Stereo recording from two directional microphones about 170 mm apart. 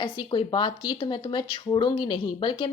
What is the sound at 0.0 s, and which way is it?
Speech, 30° left (ahead or behind).